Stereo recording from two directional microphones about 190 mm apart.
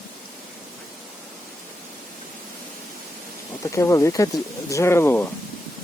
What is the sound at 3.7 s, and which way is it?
Speech, 15° left (ahead or behind).